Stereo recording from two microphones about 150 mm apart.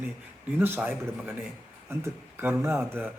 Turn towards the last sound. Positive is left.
turn(degrees=-15)  # may be behind; listen again after turning